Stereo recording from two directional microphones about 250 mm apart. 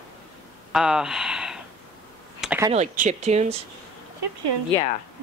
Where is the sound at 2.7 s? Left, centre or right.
Right.